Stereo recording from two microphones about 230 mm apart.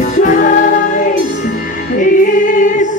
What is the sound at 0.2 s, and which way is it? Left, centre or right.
Music, left.